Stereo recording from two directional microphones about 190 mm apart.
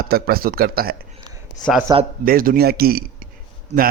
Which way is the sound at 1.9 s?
20° right (ahead or behind).